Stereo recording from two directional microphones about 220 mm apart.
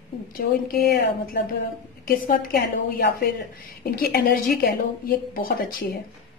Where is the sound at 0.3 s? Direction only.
40° left (ahead or behind).